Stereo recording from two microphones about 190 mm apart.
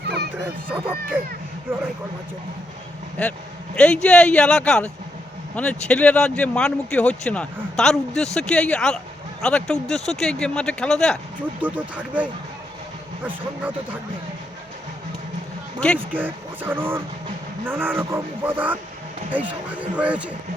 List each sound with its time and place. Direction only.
0.0 s a sound: 60° right (ahead or behind)
0.3 s speech: 10° right (ahead or behind)
3.8 s speech: 5° left (ahead or behind)
11.6 s speech: 10° right (ahead or behind)
16.1 s speech: 10° right (ahead or behind)